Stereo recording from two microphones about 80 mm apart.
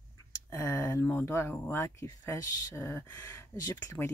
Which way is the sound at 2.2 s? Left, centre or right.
Left.